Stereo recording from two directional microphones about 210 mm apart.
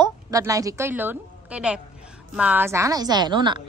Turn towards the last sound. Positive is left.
turn(degrees=-20)  # may be behind; listen again after turning